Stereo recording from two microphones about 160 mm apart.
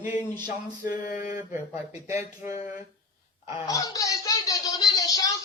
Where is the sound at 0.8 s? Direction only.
55° left (ahead or behind).